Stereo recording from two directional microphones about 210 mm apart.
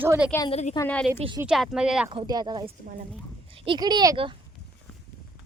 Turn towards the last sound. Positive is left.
turn(degrees=-20)  # may be behind; listen again after turning